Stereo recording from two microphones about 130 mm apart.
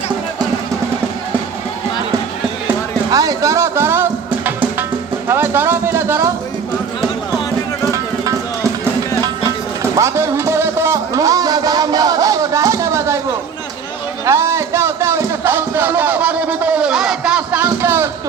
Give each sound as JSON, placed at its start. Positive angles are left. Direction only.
{"t": 3.1, "sound": "speech", "side_deg": -25}
{"t": 5.3, "sound": "a sound", "side_deg": -20}
{"t": 7.9, "sound": "music", "side_deg": -25}
{"t": 14.3, "sound": "music", "side_deg": -20}